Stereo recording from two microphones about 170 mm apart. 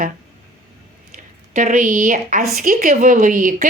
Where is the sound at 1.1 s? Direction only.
45° right (ahead or behind).